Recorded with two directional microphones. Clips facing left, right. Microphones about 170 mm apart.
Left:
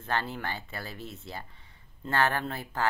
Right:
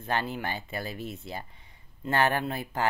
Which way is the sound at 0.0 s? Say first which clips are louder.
Right 2 dB; 15° right (ahead or behind).